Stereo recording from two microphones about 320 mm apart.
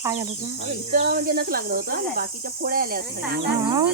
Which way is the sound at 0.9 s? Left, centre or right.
Right.